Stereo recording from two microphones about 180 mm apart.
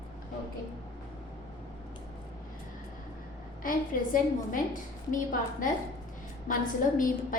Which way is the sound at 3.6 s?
50° left (ahead or behind).